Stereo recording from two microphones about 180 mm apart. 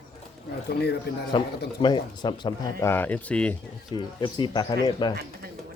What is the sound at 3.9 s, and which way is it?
Speech, 25° left (ahead or behind).